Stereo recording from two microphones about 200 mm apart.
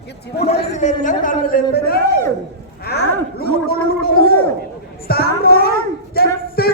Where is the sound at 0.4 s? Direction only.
35° left (ahead or behind).